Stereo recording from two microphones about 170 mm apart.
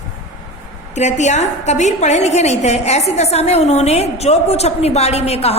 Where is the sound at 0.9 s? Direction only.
45° left (ahead or behind).